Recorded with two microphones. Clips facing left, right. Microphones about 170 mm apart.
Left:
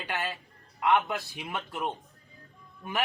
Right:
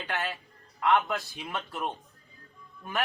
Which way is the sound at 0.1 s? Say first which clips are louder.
Even; centre (ahead or behind).